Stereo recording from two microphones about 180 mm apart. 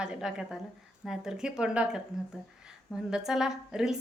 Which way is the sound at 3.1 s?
5° right (ahead or behind).